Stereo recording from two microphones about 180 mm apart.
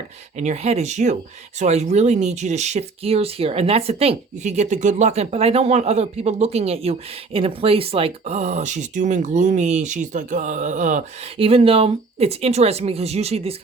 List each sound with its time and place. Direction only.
0.3 s speech: 40° right (ahead or behind)
11.3 s speech: 30° right (ahead or behind)